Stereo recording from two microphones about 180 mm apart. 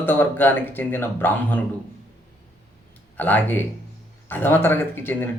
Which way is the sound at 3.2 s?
10° left (ahead or behind).